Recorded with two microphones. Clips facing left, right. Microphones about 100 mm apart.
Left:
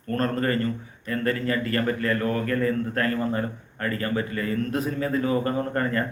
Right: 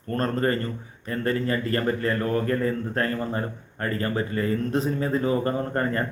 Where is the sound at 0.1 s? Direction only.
30° right (ahead or behind).